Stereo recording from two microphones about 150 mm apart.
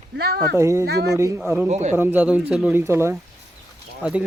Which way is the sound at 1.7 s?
50° right (ahead or behind).